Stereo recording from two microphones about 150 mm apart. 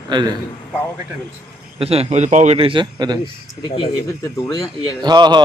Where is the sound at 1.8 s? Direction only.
40° right (ahead or behind).